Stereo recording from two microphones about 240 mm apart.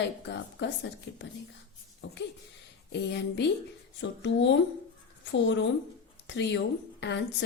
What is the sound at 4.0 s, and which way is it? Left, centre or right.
Speech, left.